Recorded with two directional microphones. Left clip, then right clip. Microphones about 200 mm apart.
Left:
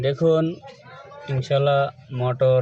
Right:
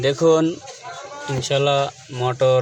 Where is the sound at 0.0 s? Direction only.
Centre (ahead or behind).